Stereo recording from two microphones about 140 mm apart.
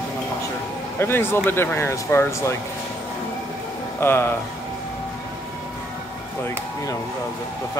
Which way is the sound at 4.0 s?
15° left (ahead or behind).